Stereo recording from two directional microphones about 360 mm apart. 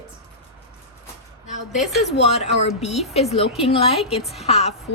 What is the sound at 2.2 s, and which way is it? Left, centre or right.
Speech, centre.